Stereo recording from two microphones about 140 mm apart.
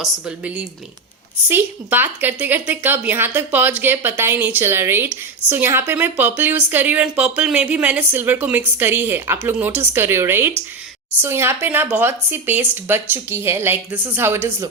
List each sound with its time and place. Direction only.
0.0 s a woman's voice: 10° right (ahead or behind)